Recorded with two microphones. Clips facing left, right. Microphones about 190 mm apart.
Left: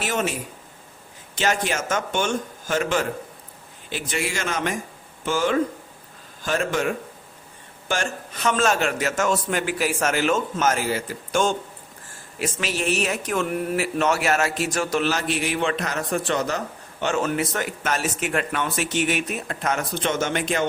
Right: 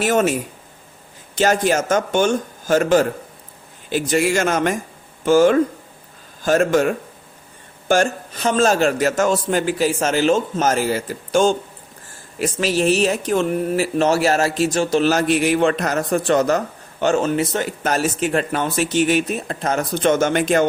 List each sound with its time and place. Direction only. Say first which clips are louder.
0.0 s a man's voice: right 8 dB; 45° right (ahead or behind)
1.4 s a man's voice: right 7 dB; 40° right (ahead or behind)
15.1 s a man's voice: right 8 dB; 45° right (ahead or behind)
17.2 s a man's voice: right 5 dB; 30° right (ahead or behind); by 20.7 s 45° right (ahead or behind)